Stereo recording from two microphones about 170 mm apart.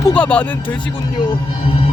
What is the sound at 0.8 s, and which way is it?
Speech, 30° left (ahead or behind).